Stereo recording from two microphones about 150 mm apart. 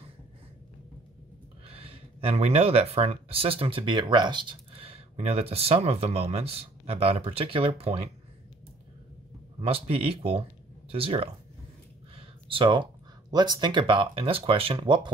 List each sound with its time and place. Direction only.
1.7 s speech: 40° right (ahead or behind)
9.6 s speech: 40° right (ahead or behind)
12.2 s a sound: 35° right (ahead or behind)
13.3 s speech: 30° right (ahead or behind)